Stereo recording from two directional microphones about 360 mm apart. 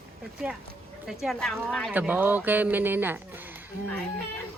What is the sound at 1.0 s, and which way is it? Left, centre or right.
Speech, centre.